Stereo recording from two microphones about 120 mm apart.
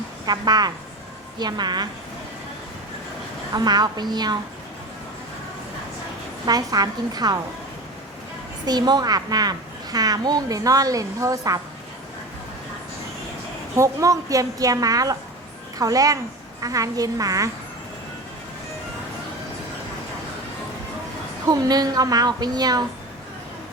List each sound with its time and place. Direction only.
0.3 s a woman's voice: 35° right (ahead or behind)
3.5 s a woman's voice: 35° right (ahead or behind)
6.4 s a woman's voice: 35° right (ahead or behind)
8.6 s a woman's voice: 35° right (ahead or behind)
13.7 s a woman's voice: 25° right (ahead or behind)
21.5 s a woman's voice: 35° right (ahead or behind)